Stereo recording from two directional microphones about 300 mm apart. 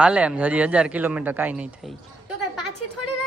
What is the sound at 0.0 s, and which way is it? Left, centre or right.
Speech, centre.